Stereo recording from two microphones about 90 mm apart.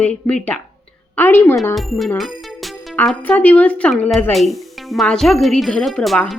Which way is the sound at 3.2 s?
20° left (ahead or behind).